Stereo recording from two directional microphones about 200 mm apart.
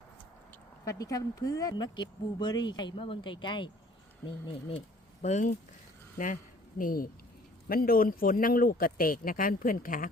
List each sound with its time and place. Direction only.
0.9 s speech: 15° left (ahead or behind)
5.2 s a man's voice: 35° left (ahead or behind)